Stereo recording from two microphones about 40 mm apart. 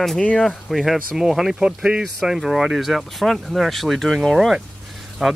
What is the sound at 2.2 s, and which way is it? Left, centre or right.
Speech, centre.